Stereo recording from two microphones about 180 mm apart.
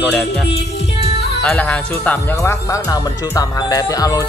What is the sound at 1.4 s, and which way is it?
Speech, 10° left (ahead or behind).